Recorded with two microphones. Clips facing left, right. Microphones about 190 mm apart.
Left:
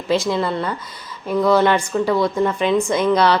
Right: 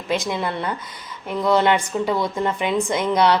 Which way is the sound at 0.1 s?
15° right (ahead or behind).